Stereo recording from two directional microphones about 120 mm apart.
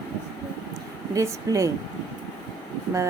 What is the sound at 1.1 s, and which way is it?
Speech, 25° right (ahead or behind).